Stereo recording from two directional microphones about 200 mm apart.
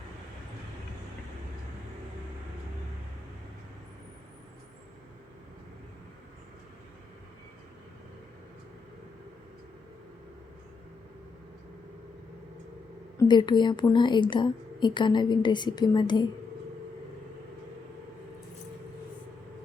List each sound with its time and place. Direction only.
13.1 s a woman's voice: 20° left (ahead or behind)